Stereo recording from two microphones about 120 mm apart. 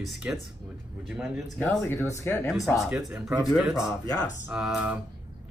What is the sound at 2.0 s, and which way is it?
Speech, 20° left (ahead or behind).